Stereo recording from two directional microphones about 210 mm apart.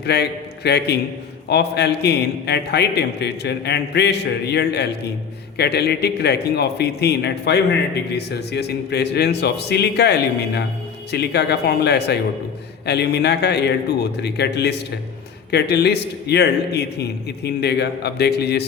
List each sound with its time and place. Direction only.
0.0 s a man's voice: 50° left (ahead or behind)